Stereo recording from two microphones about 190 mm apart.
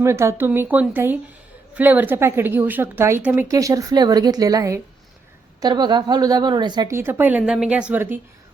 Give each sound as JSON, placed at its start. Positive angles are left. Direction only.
{"t": 0.0, "sound": "a woman's voice", "side_deg": -15}